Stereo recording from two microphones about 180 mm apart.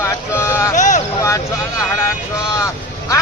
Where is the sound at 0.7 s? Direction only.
45° left (ahead or behind).